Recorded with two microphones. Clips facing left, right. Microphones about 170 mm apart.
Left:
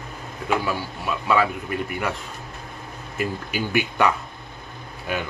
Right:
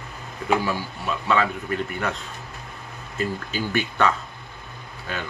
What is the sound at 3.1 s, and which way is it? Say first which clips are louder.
Speech: even; 10° left (ahead or behind).